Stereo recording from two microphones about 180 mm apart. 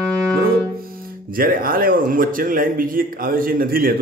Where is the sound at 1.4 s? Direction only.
55° right (ahead or behind).